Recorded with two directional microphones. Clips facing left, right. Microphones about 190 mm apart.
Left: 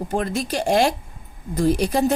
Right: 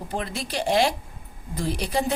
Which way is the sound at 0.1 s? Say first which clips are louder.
Left 6 dB; 45° left (ahead or behind).